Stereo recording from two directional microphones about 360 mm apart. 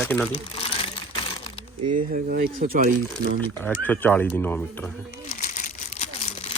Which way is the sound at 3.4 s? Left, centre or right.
Centre.